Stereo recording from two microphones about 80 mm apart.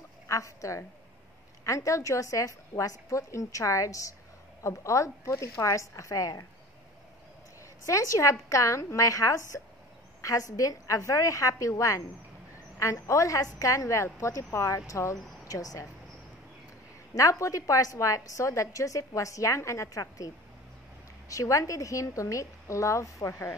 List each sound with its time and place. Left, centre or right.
0.3 s a woman's voice: left
7.8 s a woman's voice: left
17.1 s a woman's voice: left
21.3 s a woman's voice: left